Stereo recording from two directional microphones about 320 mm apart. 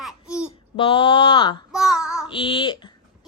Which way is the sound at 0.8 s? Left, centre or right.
Centre.